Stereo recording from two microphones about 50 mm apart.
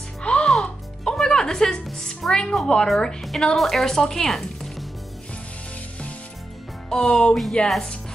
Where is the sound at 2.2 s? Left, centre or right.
Centre.